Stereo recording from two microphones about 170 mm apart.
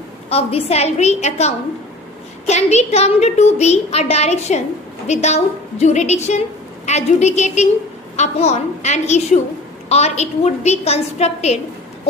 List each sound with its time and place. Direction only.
0.3 s a woman's voice: 35° left (ahead or behind)